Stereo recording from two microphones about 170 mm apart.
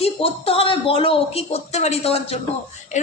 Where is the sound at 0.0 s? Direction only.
35° left (ahead or behind).